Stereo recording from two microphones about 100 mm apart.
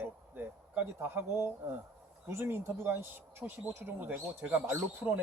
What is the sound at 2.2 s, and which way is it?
Speech, 25° right (ahead or behind).